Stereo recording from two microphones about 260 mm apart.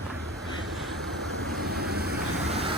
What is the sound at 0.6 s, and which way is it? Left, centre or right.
Vehicle, centre.